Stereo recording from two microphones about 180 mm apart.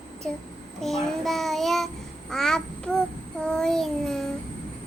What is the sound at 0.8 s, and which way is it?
Child singing, centre (ahead or behind).